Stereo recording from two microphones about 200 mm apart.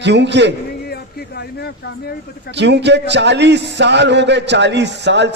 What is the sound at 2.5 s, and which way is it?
A man's voice, 60° right (ahead or behind).